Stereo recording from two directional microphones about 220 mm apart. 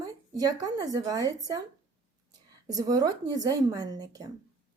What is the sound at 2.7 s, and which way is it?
A woman's voice, 15° right (ahead or behind).